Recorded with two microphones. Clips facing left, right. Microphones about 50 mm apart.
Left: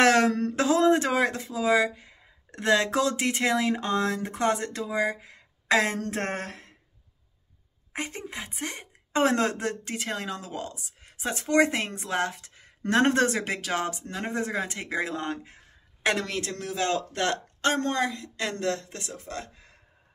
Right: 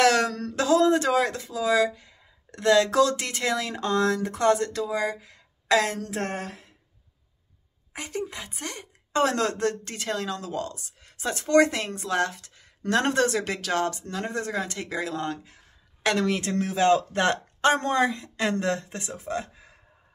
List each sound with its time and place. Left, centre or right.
0.0 s speech: left
5.9 s a sound: left
7.9 s a woman's voice: left
16.3 s speech: right
19.2 s speech: centre